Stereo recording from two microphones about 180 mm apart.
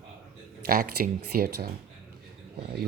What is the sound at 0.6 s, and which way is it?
Speech, 55° right (ahead or behind).